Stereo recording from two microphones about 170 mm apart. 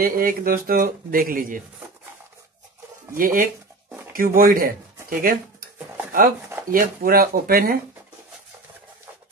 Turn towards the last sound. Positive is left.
turn(degrees=-60)  # may be behind; listen again after turning